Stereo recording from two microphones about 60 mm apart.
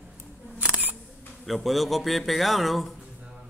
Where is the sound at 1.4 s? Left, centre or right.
Centre.